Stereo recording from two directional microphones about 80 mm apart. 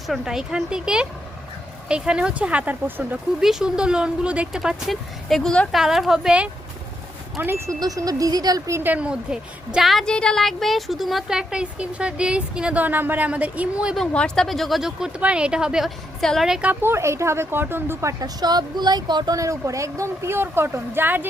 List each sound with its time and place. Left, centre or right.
0.1 s a woman's voice: centre; by 3.2 s right
3.4 s a woman's voice: centre
5.7 s speech: centre
7.3 s a woman's voice: right
7.8 s speech: right
8.8 s a woman's voice: centre
14.1 s a woman's voice: centre
16.2 s speech: centre
16.5 s a woman's voice: centre
16.8 s a woman's voice: right
18.2 s speech: right
19.4 s a woman's voice: right